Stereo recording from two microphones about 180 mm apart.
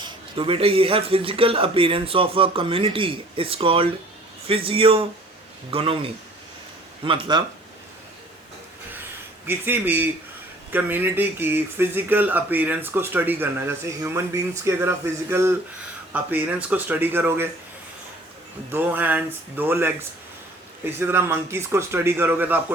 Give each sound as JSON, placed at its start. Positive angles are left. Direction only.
{"t": 0.0, "sound": "a man's voice", "side_deg": -30}
{"t": 9.5, "sound": "speech", "side_deg": -10}
{"t": 18.7, "sound": "speech", "side_deg": -10}